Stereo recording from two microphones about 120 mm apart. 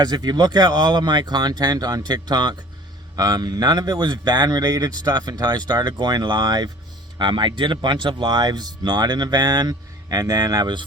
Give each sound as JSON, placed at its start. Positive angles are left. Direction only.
{"t": 0.0, "sound": "speech", "side_deg": -35}